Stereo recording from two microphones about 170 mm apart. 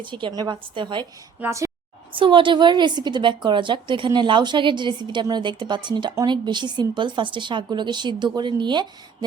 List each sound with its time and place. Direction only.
0.0 s a woman's voice: 30° right (ahead or behind)
1.4 s a woman's voice: 15° right (ahead or behind)
2.1 s a woman's voice: 30° right (ahead or behind)